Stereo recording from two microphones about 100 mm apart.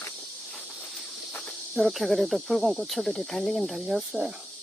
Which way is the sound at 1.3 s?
5° left (ahead or behind).